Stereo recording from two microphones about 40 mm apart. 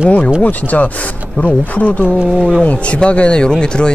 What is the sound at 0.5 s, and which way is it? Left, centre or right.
Speech, left.